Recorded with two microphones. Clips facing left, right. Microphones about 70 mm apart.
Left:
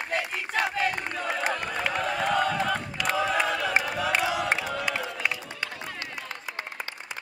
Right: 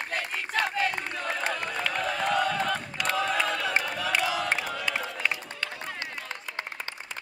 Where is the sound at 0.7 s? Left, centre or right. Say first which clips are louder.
Left 1 dB; centre.